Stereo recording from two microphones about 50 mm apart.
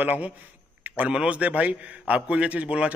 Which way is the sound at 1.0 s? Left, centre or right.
Right.